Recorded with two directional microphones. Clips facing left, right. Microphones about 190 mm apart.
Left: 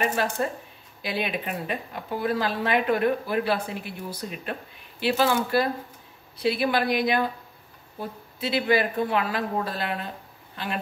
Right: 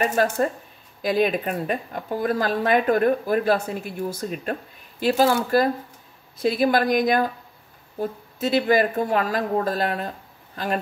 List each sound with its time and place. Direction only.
0.0 s speech: 45° right (ahead or behind)